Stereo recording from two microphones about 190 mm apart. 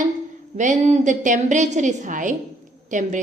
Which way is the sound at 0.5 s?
40° right (ahead or behind).